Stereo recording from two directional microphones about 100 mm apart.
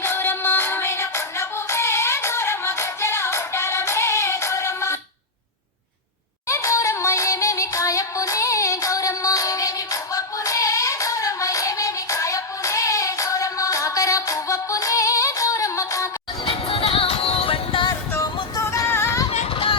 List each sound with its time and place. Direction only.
0.0 s music: 20° left (ahead or behind)
6.5 s music: 30° left (ahead or behind)
16.5 s music: 65° left (ahead or behind)
18.5 s music: 30° left (ahead or behind)
19.3 s a sound: 65° left (ahead or behind)